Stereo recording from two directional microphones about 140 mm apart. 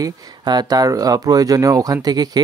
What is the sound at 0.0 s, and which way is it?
Speech, 30° right (ahead or behind).